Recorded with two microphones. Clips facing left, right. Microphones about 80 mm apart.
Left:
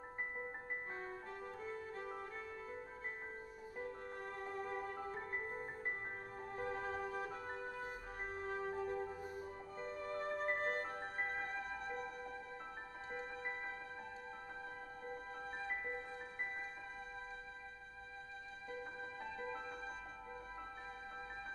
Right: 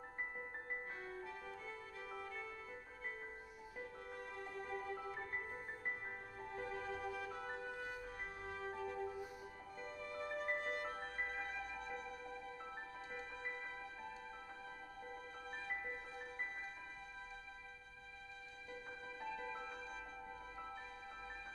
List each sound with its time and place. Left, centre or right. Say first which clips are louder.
1.6 s music: left 5 dB; left
3.7 s music: left 4 dB; left
6.5 s music: left 3 dB; left
8.4 s music: left 5 dB; left
19.3 s music: left 3 dB; left